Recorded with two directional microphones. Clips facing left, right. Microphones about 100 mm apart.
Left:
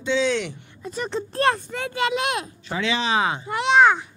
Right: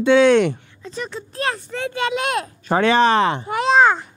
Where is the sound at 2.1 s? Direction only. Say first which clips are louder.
Right 2 dB; 35° right (ahead or behind); by 3.5 s 65° right (ahead or behind).